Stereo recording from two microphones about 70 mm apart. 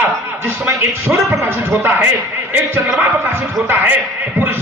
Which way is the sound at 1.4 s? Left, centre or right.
Right.